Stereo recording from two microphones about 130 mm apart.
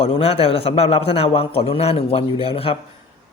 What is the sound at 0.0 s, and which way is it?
A woman's voice, 50° left (ahead or behind).